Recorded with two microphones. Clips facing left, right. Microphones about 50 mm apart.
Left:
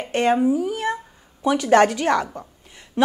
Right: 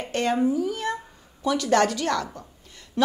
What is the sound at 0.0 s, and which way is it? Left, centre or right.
A woman's voice, left.